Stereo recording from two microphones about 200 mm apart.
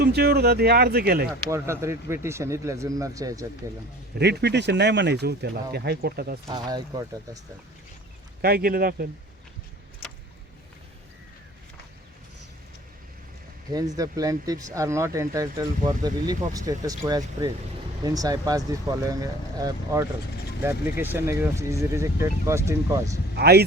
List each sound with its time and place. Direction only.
0.0 s speech: 55° right (ahead or behind)
1.5 s speech: 15° right (ahead or behind)
4.2 s speech: 55° right (ahead or behind)
6.5 s speech: 20° right (ahead or behind)
8.4 s speech: 50° right (ahead or behind)
13.7 s speech: 20° right (ahead or behind)
23.3 s speech: 55° right (ahead or behind)